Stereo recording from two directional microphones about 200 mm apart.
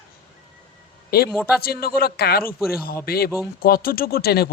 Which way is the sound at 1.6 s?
50° left (ahead or behind).